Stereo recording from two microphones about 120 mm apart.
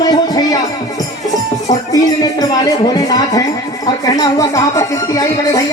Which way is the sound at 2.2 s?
35° left (ahead or behind).